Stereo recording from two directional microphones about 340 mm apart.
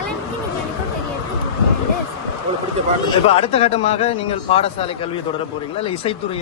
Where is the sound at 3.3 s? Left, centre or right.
Centre.